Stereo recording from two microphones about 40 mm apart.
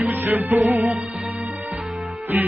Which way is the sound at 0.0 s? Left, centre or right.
Right.